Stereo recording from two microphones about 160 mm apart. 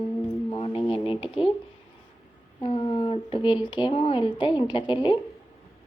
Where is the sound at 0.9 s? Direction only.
30° left (ahead or behind).